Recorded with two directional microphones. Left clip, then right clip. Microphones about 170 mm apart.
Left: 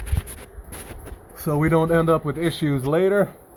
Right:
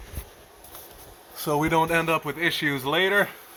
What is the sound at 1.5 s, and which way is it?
Speech, 20° right (ahead or behind).